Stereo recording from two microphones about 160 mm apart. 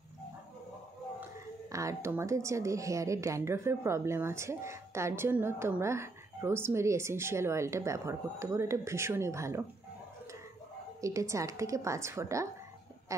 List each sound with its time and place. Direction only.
1.7 s a woman's voice: 20° right (ahead or behind)
11.0 s a woman's voice: 20° right (ahead or behind)